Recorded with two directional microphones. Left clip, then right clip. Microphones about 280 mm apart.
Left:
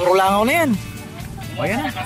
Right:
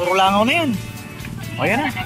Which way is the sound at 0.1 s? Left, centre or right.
Left.